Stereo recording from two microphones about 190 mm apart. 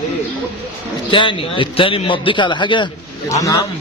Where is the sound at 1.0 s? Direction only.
25° left (ahead or behind).